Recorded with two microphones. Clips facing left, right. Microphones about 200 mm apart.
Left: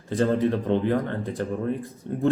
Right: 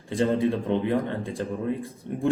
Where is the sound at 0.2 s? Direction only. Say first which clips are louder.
Left 1 dB; 15° right (ahead or behind).